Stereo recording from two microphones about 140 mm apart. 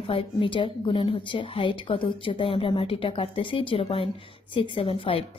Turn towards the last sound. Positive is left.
turn(degrees=40)  # may be behind; listen again after turning